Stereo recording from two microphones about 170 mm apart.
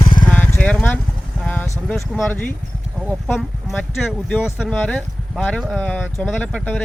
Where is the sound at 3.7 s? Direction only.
Centre (ahead or behind).